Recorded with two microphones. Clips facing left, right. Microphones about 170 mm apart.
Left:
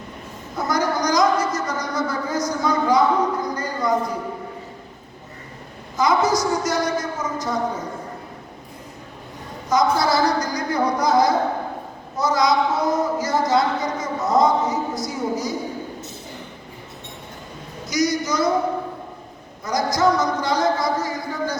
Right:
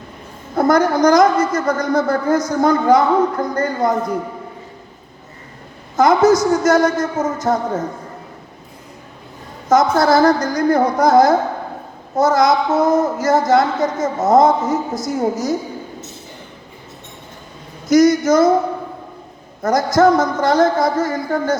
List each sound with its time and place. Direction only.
0.5 s a woman's voice: 55° right (ahead or behind)
6.0 s a woman's voice: 50° right (ahead or behind)
9.6 s a woman's voice: 50° right (ahead or behind)
17.8 s a woman's voice: 50° right (ahead or behind)
19.6 s a woman's voice: 50° right (ahead or behind)